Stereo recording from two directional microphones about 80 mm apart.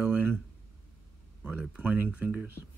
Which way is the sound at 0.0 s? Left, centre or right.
Right.